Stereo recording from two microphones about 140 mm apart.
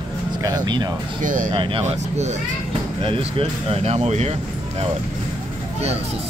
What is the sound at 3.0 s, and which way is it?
Speech, 40° right (ahead or behind).